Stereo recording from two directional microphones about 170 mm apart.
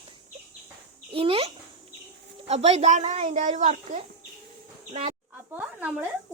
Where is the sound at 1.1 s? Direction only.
35° right (ahead or behind).